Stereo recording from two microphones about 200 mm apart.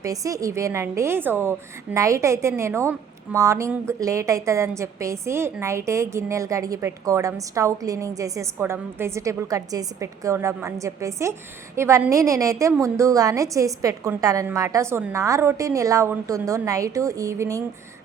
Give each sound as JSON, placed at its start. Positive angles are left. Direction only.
{"t": 0.0, "sound": "a woman's voice", "side_deg": -15}